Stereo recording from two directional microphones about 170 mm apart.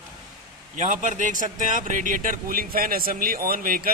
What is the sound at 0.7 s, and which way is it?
Speech, 50° right (ahead or behind).